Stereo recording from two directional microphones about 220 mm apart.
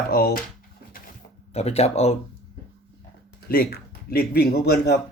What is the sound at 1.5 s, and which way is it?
Speech, 30° left (ahead or behind).